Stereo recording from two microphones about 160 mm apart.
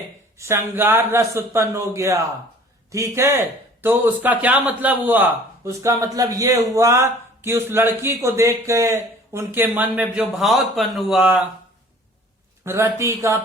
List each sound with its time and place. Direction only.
0.3 s a man's voice: 15° right (ahead or behind)
12.6 s a man's voice: 15° right (ahead or behind)